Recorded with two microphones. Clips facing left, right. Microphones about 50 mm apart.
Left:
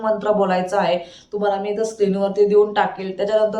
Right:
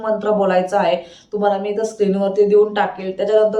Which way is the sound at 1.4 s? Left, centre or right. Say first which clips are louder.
Right 2 dB; right.